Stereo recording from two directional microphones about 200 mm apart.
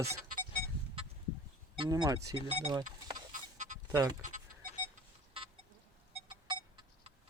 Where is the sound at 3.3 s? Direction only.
40° right (ahead or behind).